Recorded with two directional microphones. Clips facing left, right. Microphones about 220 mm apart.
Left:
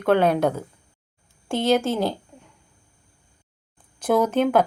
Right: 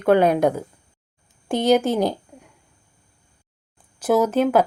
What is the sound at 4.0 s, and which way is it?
Speech, 5° right (ahead or behind).